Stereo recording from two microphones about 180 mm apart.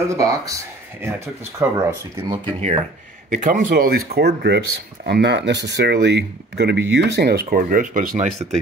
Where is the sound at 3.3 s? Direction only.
45° right (ahead or behind).